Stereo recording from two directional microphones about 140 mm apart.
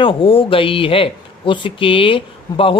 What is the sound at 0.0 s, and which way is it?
Speech, 40° left (ahead or behind).